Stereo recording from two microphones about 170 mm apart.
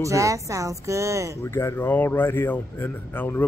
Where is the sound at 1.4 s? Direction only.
15° left (ahead or behind).